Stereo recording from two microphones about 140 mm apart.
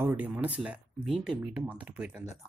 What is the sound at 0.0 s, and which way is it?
Speech, 15° right (ahead or behind).